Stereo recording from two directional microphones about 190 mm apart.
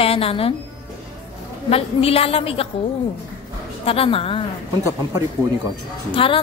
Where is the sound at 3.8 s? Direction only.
30° left (ahead or behind).